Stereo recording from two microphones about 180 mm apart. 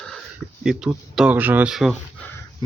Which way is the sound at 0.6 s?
Centre (ahead or behind).